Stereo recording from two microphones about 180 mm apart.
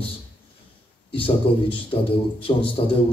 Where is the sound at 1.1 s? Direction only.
30° left (ahead or behind).